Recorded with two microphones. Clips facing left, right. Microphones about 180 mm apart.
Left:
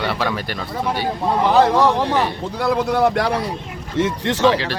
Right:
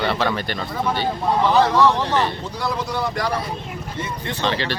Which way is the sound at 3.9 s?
90° left.